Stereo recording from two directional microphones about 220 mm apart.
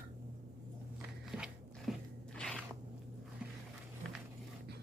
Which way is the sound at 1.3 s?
Centre (ahead or behind).